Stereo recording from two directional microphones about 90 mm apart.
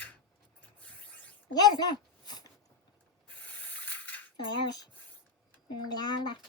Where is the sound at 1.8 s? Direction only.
50° left (ahead or behind).